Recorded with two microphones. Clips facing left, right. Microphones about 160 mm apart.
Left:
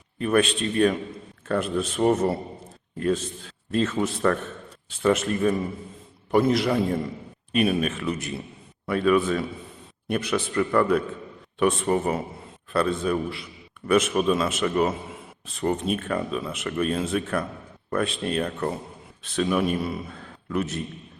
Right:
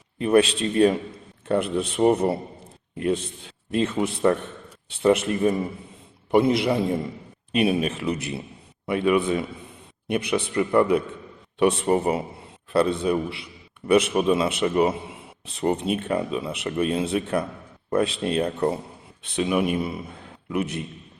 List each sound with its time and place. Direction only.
0.2 s a man's voice: 25° right (ahead or behind)